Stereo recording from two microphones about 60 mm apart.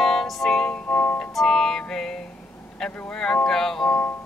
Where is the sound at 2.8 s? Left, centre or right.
Centre.